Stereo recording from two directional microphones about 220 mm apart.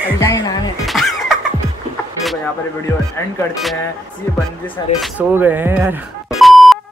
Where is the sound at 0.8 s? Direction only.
Centre (ahead or behind).